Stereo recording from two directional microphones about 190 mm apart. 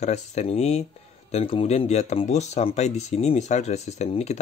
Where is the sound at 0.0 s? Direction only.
35° left (ahead or behind).